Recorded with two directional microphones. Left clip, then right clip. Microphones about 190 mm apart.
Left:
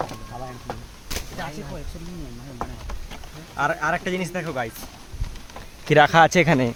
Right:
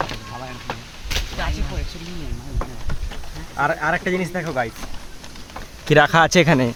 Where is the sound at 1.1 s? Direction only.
60° left (ahead or behind).